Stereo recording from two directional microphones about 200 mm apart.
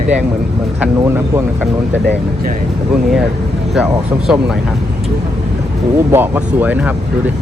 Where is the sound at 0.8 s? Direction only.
10° right (ahead or behind).